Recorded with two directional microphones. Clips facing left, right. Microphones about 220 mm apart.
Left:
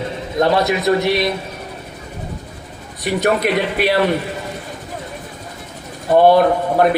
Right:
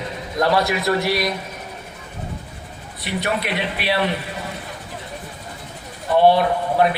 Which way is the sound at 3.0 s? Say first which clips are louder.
Left 7 dB; 45° left (ahead or behind).